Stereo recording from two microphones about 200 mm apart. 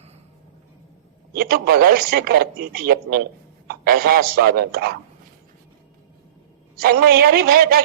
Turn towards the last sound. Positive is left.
turn(degrees=-45)  # may be behind; listen again after turning